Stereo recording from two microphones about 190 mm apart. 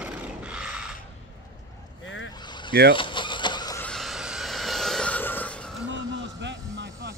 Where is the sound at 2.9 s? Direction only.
25° left (ahead or behind).